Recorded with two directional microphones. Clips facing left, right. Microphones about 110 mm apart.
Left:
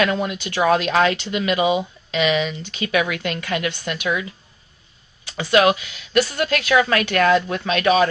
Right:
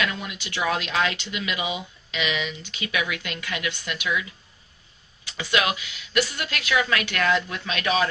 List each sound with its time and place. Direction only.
0.0 s speech: 45° left (ahead or behind)